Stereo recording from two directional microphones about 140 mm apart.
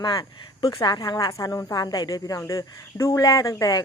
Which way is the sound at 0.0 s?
30° left (ahead or behind).